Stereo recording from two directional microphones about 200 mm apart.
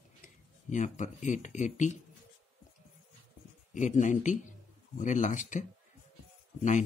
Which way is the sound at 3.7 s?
35° left (ahead or behind).